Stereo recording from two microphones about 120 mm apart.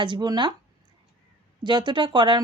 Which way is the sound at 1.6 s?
40° right (ahead or behind).